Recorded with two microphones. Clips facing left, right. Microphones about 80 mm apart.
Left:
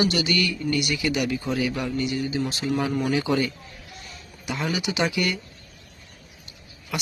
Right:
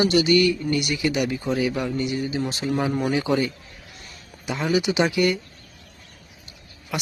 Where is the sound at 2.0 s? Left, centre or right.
Right.